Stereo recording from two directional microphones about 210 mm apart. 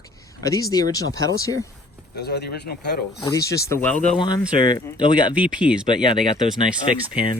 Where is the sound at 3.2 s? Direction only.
15° left (ahead or behind).